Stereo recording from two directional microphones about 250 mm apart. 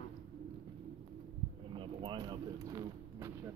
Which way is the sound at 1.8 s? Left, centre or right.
Centre.